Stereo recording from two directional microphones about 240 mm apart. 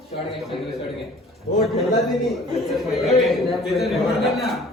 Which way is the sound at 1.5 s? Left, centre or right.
Left.